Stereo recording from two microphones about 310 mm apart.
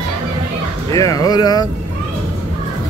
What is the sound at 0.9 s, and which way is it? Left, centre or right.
Speech, centre.